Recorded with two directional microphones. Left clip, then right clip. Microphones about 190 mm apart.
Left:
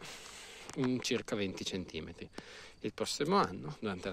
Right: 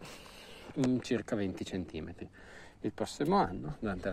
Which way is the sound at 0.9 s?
25° left (ahead or behind).